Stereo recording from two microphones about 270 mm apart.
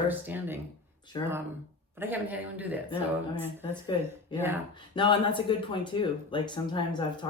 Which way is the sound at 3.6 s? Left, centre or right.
Centre.